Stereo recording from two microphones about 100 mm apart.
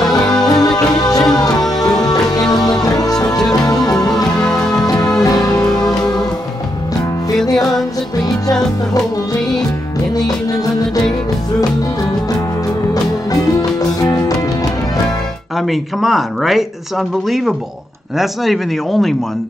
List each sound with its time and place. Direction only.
0.5 s music: 40° left (ahead or behind)
3.2 s music: 5° left (ahead or behind)
3.6 s music: 35° left (ahead or behind)
3.9 s music: 5° left (ahead or behind)
5.2 s music: 40° left (ahead or behind)
12.9 s music: 40° left (ahead or behind)
15.5 s speech: centre (ahead or behind)
18.1 s speech: centre (ahead or behind)